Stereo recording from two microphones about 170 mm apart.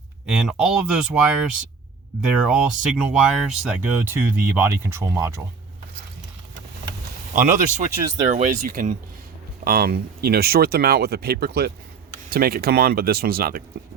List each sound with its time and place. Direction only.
0.3 s speech: 5° right (ahead or behind)
7.3 s speech: 50° right (ahead or behind)
9.6 s speech: 65° right (ahead or behind)